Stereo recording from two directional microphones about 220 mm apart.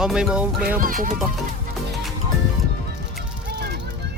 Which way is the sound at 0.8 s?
40° right (ahead or behind).